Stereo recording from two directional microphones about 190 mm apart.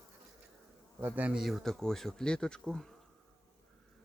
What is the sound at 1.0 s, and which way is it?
Speech, 10° right (ahead or behind).